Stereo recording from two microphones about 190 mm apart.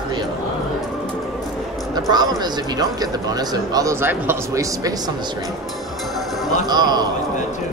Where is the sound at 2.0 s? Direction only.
20° right (ahead or behind).